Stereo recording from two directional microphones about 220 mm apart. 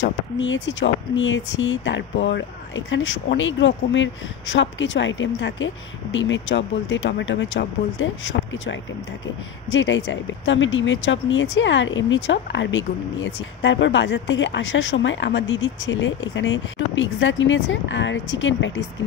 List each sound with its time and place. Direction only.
0.0 s speech: 55° left (ahead or behind)